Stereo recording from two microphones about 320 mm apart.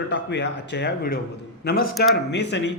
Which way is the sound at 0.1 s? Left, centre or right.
Left.